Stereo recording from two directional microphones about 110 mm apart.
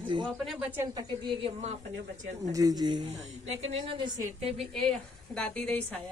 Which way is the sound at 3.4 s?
70° right (ahead or behind).